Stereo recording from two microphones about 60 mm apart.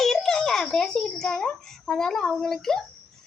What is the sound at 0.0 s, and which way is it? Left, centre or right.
A child's voice, centre.